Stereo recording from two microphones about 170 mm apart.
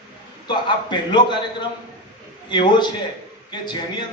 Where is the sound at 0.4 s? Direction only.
25° left (ahead or behind).